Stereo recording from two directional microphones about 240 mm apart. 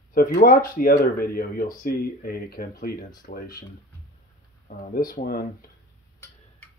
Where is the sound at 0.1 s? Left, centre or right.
Left.